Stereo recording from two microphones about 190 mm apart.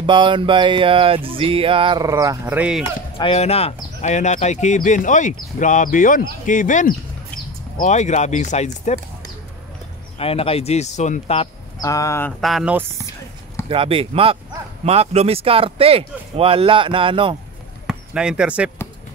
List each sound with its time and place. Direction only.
0.0 s music: 25° right (ahead or behind)
2.8 s speech: 30° left (ahead or behind)
10.1 s speech: 30° left (ahead or behind)
11.8 s speech: 15° left (ahead or behind)
12.4 s speech: centre (ahead or behind)
13.7 s music: 30° right (ahead or behind)
17.8 s speech: 5° right (ahead or behind)